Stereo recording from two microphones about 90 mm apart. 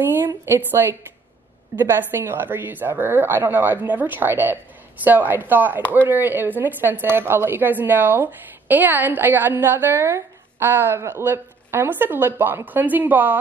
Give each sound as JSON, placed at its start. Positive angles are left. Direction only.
{"t": 0.5, "sound": "a woman's voice", "side_deg": -25}
{"t": 5.8, "sound": "speech", "side_deg": 15}
{"t": 6.0, "sound": "a woman's voice", "side_deg": -20}